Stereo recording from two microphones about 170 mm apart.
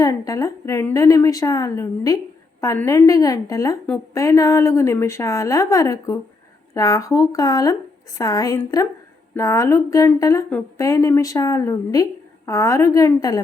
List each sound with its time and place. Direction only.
0.0 s a woman's voice: 20° left (ahead or behind)
3.8 s a woman's voice: 10° left (ahead or behind)
4.2 s a woman's voice: 20° left (ahead or behind)